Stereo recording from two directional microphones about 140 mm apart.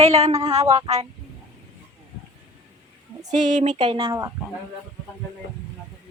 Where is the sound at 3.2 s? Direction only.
30° right (ahead or behind).